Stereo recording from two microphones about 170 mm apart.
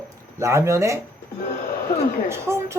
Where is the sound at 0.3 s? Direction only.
15° right (ahead or behind).